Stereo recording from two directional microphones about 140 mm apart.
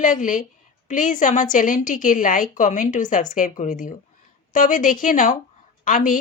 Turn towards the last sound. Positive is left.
turn(degrees=70)  # may be behind; listen again after turning